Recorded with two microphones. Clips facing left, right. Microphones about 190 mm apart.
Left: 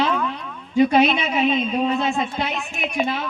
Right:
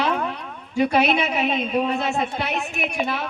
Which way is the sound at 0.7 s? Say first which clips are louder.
Left 4 dB; 20° left (ahead or behind).